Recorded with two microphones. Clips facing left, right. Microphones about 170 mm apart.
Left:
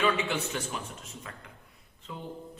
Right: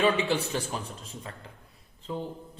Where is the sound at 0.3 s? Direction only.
35° right (ahead or behind).